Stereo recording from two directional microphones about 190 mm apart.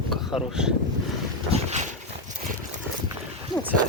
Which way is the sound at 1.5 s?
35° right (ahead or behind).